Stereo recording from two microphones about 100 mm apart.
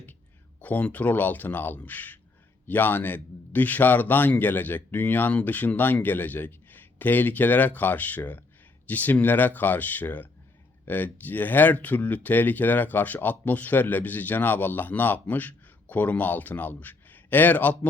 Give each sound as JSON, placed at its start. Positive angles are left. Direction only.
{"t": 0.6, "sound": "speech", "side_deg": 15}